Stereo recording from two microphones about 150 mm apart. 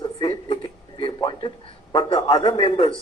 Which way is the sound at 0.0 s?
35° left (ahead or behind).